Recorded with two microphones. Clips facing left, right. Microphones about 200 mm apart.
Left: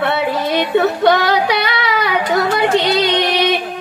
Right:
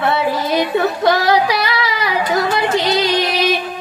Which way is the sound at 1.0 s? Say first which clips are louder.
Left 1 dB; 60° left (ahead or behind).